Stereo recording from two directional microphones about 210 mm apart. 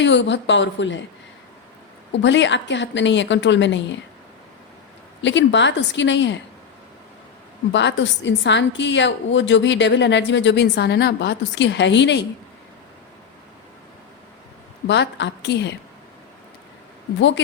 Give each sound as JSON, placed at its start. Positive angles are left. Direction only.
{"t": 0.0, "sound": "a woman's voice", "side_deg": 60}
{"t": 2.1, "sound": "a woman's voice", "side_deg": 60}
{"t": 5.2, "sound": "a woman's voice", "side_deg": 60}
{"t": 7.7, "sound": "a woman's voice", "side_deg": 60}
{"t": 14.8, "sound": "a woman's voice", "side_deg": 55}
{"t": 17.2, "sound": "a woman's voice", "side_deg": 60}